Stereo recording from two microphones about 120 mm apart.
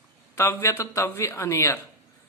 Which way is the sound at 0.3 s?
20° left (ahead or behind).